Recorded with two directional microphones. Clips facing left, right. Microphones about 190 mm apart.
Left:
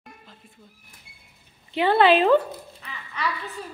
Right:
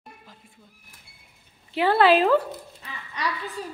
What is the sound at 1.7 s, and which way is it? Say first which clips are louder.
Speech: left 1 dB; 5° right (ahead or behind).